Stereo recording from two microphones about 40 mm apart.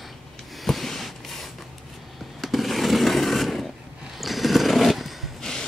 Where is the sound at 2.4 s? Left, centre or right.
Centre.